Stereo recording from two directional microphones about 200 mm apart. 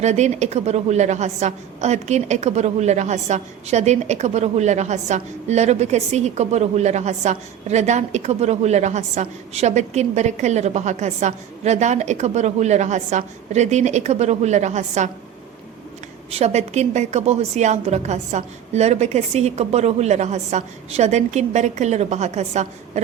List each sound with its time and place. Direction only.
0.0 s a woman's voice: 35° right (ahead or behind)
16.3 s a woman's voice: 35° right (ahead or behind)